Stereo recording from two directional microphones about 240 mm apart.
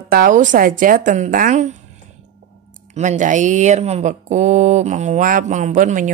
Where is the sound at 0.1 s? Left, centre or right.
Right.